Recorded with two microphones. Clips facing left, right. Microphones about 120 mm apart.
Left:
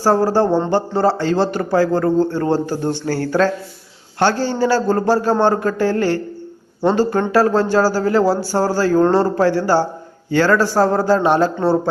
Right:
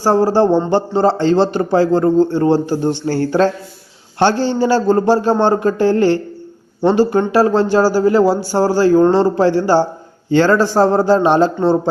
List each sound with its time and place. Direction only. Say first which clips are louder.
0.0 s a man's voice: right 2 dB; 20° right (ahead or behind)